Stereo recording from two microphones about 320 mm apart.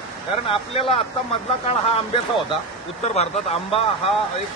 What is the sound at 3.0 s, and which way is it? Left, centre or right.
Speech, centre.